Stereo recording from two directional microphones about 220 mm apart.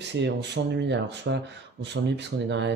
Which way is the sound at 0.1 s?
50° right (ahead or behind).